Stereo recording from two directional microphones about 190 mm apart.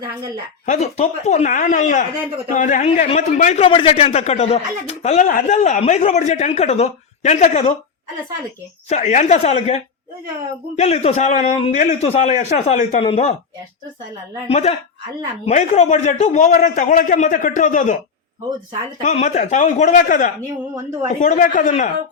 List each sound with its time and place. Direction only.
0.6 s a man's voice: 40° left (ahead or behind)
8.9 s a man's voice: 35° left (ahead or behind)
14.4 s a man's voice: 35° left (ahead or behind)
19.0 s a man's voice: 35° left (ahead or behind)